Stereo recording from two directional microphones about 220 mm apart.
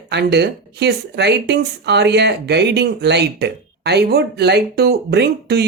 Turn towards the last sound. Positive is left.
turn(degrees=-50)  # may be behind; listen again after turning